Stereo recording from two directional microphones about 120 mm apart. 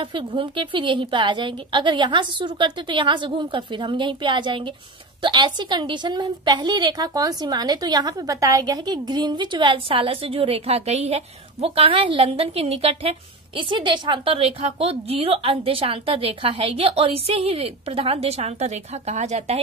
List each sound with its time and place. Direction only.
0.0 s a woman's voice: 45° right (ahead or behind)
13.6 s a woman's voice: 45° right (ahead or behind); by 19.6 s 65° right (ahead or behind)